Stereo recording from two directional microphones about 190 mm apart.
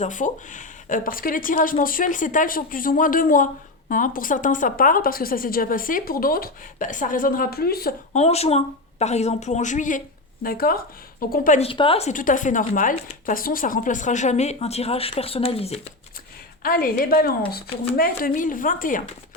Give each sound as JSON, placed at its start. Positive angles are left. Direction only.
{"t": 0.0, "sound": "speech", "side_deg": 40}
{"t": 8.1, "sound": "speech", "side_deg": 35}
{"t": 11.6, "sound": "speech", "side_deg": 30}
{"t": 16.6, "sound": "speech", "side_deg": 50}